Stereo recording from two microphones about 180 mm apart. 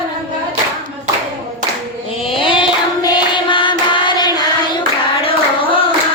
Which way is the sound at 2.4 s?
25° left (ahead or behind).